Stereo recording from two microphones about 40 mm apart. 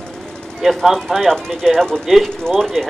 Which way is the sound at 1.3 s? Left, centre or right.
Centre.